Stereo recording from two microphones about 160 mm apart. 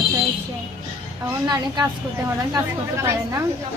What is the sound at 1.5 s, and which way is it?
Speech, 25° right (ahead or behind).